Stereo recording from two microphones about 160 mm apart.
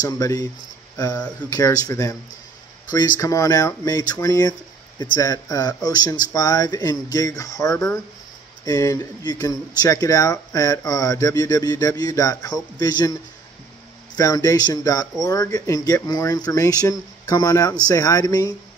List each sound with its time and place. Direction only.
0.0 s speech: 25° left (ahead or behind)